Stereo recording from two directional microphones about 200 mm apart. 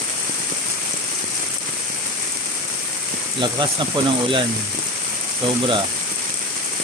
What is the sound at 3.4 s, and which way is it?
Speech, 25° right (ahead or behind).